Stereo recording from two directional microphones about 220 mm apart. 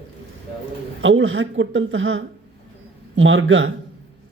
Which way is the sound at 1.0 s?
60° right (ahead or behind).